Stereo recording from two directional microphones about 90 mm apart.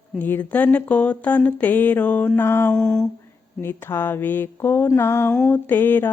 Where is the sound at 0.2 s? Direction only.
20° left (ahead or behind).